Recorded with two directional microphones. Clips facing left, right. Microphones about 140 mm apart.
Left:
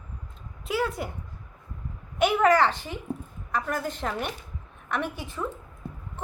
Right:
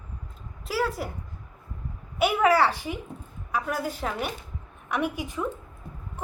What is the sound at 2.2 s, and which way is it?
A woman's voice, 5° right (ahead or behind).